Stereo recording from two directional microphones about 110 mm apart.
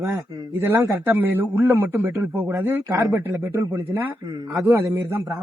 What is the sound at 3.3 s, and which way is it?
A man's voice, 30° right (ahead or behind).